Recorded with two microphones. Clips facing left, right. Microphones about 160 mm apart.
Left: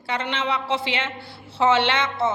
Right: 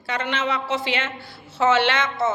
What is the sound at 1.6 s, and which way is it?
Speech, 20° left (ahead or behind).